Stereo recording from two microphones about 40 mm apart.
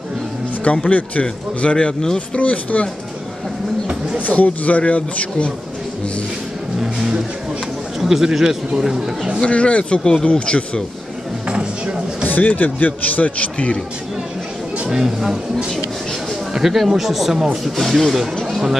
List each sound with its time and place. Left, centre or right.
0.8 s speech: left
4.2 s a man's voice: left
6.8 s a man's voice: centre
9.4 s speech: left
11.4 s a sound: right
12.3 s a man's voice: left
14.9 s a man's voice: centre
16.5 s a man's voice: centre